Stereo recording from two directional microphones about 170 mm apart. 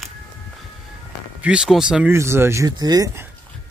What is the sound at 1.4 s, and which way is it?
Speech, 5° right (ahead or behind).